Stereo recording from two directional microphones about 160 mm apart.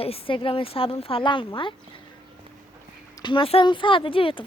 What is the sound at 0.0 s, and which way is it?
Speech, 35° left (ahead or behind).